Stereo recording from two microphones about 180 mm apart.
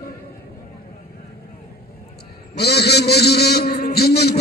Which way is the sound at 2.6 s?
65° left (ahead or behind).